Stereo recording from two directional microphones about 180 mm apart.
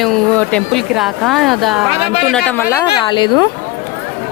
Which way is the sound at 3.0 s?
25° left (ahead or behind).